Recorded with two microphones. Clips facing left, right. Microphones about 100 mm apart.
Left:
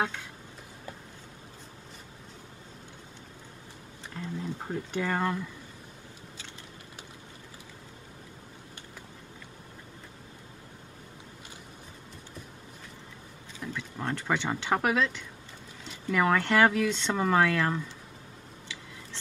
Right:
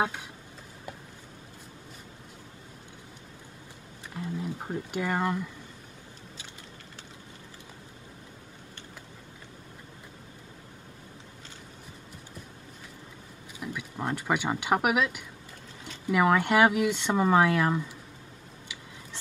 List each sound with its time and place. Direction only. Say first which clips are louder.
0.0 s speech: right 2 dB; 15° right (ahead or behind)
4.1 s speech: right 2 dB; 15° right (ahead or behind)
13.6 s speech: right 1 dB; 15° right (ahead or behind)